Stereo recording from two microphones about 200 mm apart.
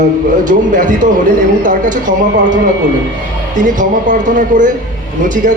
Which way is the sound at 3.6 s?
40° right (ahead or behind).